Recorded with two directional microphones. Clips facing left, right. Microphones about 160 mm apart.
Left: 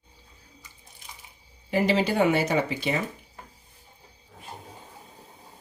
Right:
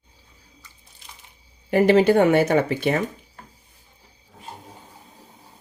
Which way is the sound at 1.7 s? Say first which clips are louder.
Right 8 dB; 55° right (ahead or behind).